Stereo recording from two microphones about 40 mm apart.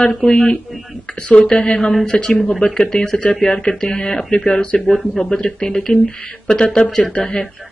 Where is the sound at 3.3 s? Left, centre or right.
Left.